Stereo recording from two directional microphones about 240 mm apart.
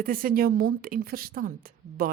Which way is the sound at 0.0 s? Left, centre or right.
Right.